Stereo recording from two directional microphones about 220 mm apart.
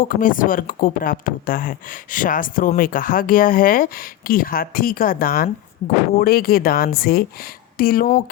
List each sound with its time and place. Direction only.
0.0 s speech: 40° left (ahead or behind)